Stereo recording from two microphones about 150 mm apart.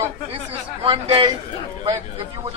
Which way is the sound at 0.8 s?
35° right (ahead or behind).